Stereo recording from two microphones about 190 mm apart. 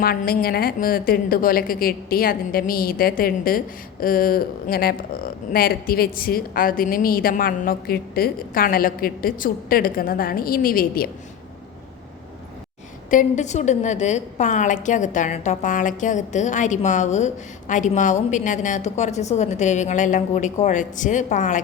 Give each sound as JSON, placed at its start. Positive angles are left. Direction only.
{"t": 0.0, "sound": "a woman's voice", "side_deg": 50}
{"t": 13.1, "sound": "a woman's voice", "side_deg": 40}